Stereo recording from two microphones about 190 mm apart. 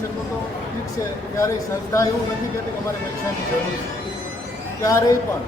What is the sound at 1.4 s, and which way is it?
Speech, 15° left (ahead or behind).